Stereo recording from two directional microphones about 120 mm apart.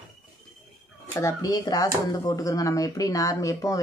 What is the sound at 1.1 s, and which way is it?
Speech, 30° left (ahead or behind).